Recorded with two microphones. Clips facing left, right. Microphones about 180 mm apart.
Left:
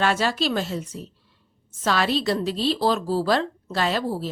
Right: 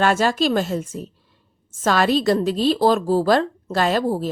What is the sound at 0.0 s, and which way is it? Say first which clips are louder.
A woman's voice: right 4 dB; 45° right (ahead or behind).